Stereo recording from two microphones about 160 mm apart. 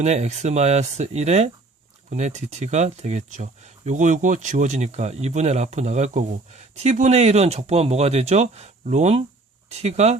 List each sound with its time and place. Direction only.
0.0 s speech: 45° right (ahead or behind)